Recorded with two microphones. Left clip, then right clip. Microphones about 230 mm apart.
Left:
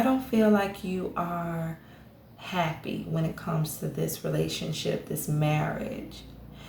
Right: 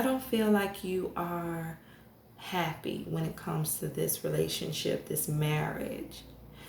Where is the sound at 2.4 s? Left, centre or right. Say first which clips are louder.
Left 3 dB; right.